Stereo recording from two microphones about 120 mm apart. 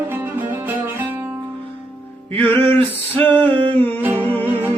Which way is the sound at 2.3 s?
15° left (ahead or behind).